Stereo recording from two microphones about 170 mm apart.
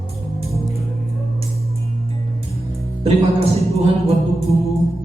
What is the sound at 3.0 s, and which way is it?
Speech, 35° right (ahead or behind).